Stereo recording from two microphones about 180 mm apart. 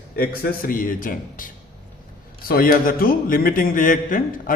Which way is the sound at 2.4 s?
55° left (ahead or behind).